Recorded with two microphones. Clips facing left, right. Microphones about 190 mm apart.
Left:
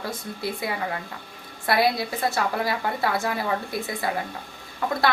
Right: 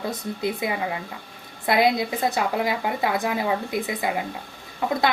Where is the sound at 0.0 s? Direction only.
20° right (ahead or behind).